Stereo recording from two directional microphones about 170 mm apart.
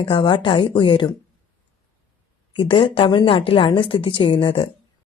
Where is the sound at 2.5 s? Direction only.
30° left (ahead or behind).